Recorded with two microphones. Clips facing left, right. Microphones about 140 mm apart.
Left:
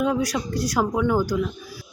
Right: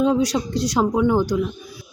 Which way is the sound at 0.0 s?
25° right (ahead or behind).